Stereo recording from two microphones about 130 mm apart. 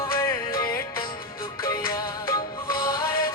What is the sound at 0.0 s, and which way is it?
Music, 20° left (ahead or behind).